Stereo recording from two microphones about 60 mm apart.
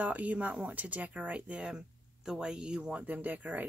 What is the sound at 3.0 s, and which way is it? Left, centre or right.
Speech, right.